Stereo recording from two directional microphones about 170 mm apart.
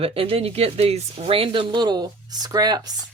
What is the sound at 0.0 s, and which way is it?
Speech, 35° right (ahead or behind).